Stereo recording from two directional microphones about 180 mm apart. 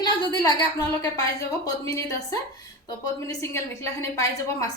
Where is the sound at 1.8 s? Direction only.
20° left (ahead or behind).